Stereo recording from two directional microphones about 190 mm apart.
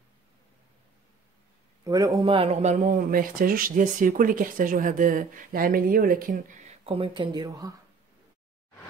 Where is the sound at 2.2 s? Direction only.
30° right (ahead or behind).